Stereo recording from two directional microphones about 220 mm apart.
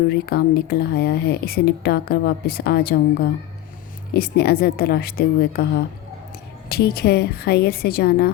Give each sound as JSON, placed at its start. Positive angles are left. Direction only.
{"t": 0.1, "sound": "speech", "side_deg": 45}
{"t": 4.1, "sound": "speech", "side_deg": 45}